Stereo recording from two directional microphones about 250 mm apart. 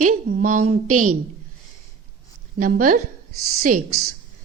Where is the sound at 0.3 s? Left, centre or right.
Right.